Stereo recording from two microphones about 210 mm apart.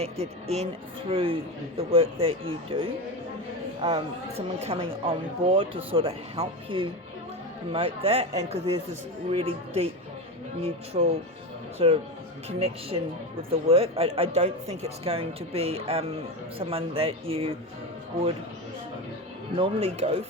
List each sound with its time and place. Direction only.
0.0 s speech: 30° right (ahead or behind)
10.9 s speech: 30° right (ahead or behind)
19.5 s speech: 25° right (ahead or behind)